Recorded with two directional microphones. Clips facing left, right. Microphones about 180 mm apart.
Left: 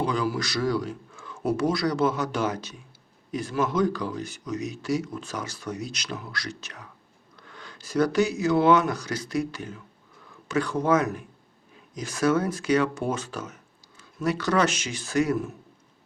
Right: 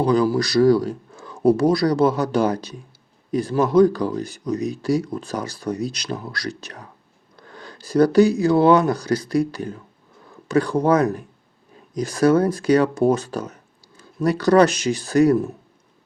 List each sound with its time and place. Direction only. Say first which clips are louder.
0.0 s speech: right 8 dB; 35° right (ahead or behind)